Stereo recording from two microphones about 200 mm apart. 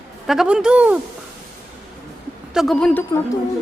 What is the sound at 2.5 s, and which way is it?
Speech, centre (ahead or behind).